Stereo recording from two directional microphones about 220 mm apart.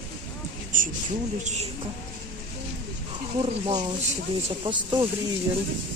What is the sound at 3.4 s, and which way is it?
Speech, 25° right (ahead or behind).